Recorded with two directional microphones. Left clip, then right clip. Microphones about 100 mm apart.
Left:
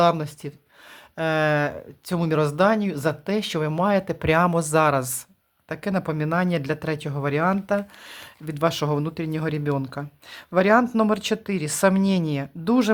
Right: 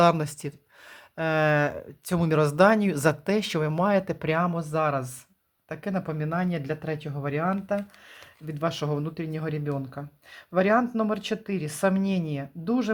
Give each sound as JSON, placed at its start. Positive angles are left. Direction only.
{"t": 0.0, "sound": "speech", "side_deg": -5}
{"t": 0.9, "sound": "speech", "side_deg": 5}
{"t": 3.3, "sound": "speech", "side_deg": 0}
{"t": 4.4, "sound": "speech", "side_deg": 50}
{"t": 5.6, "sound": "speech", "side_deg": 25}
{"t": 6.1, "sound": "speech", "side_deg": 50}
{"t": 12.6, "sound": "speech", "side_deg": 55}